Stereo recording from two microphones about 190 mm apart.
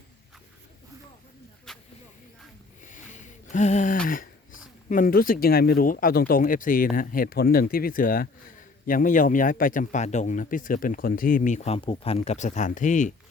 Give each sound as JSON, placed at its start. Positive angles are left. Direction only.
{"t": 1.7, "sound": "snake", "side_deg": 0}
{"t": 2.8, "sound": "a sound", "side_deg": 40}
{"t": 4.9, "sound": "speech", "side_deg": 45}